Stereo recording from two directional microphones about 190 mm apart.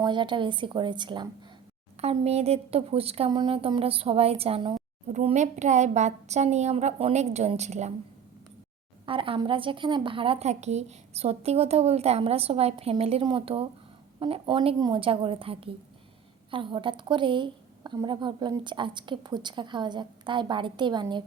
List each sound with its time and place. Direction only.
0.0 s a woman's voice: 25° right (ahead or behind)
5.1 s a woman's voice: 40° right (ahead or behind)
9.0 s a woman's voice: 30° right (ahead or behind)